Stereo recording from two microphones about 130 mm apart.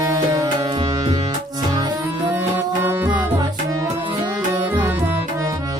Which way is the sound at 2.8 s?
15° right (ahead or behind).